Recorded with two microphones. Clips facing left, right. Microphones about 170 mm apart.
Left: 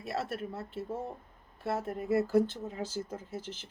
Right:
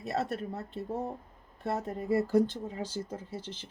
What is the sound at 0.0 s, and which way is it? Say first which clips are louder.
Speech: right 3 dB; 20° right (ahead or behind).